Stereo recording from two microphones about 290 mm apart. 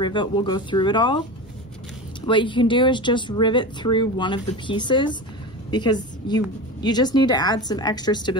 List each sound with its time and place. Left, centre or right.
0.0 s speech: centre
2.2 s a woman's voice: centre